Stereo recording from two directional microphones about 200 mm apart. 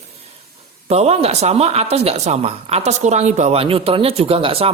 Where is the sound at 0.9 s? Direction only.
30° right (ahead or behind).